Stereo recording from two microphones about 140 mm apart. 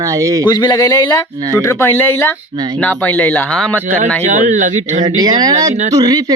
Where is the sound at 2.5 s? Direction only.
30° right (ahead or behind).